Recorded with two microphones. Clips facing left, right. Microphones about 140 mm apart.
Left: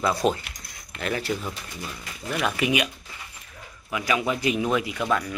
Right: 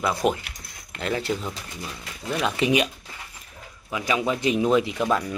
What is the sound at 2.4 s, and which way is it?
Speech, 25° right (ahead or behind).